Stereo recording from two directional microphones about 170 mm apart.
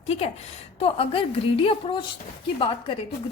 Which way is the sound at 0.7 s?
35° left (ahead or behind).